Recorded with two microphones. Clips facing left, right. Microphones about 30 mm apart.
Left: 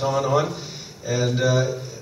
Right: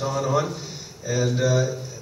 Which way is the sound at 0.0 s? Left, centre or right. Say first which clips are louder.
Left 3 dB; centre.